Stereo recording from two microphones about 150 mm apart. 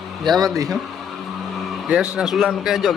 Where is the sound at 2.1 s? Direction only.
Centre (ahead or behind).